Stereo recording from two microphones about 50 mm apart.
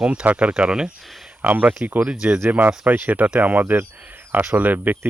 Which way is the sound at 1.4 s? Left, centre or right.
Right.